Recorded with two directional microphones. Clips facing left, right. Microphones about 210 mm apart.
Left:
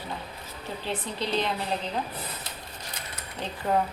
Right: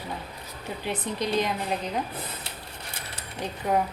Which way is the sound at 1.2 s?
10° right (ahead or behind).